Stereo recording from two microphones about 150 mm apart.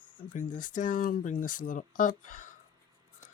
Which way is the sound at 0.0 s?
60° left (ahead or behind).